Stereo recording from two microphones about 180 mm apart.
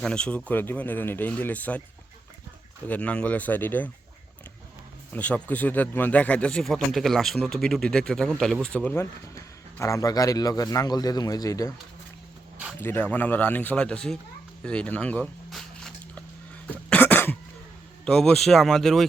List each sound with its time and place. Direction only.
0.0 s speech: 5° left (ahead or behind)
2.8 s speech: 10° left (ahead or behind)
5.1 s speech: 10° left (ahead or behind)
12.8 s speech: 10° left (ahead or behind)
16.6 s cough: 10° left (ahead or behind)
18.0 s speech: 5° left (ahead or behind)